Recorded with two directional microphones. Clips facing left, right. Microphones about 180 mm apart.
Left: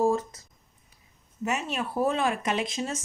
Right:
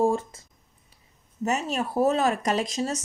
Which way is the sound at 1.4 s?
40° right (ahead or behind).